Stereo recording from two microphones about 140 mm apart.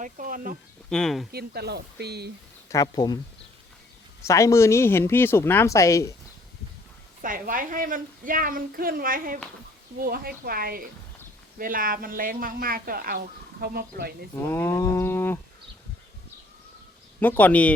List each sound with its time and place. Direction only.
0.0 s speech: 75° right (ahead or behind)
0.9 s speech: 5° left (ahead or behind)
2.6 s speech: 25° left (ahead or behind)
4.3 s speech: 20° left (ahead or behind)
7.2 s a woman's voice: 85° right
14.4 s livestock: 15° left (ahead or behind)
17.2 s livestock: 10° left (ahead or behind)